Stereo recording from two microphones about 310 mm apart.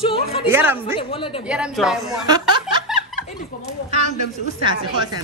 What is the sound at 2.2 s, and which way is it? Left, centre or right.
Snicker, centre.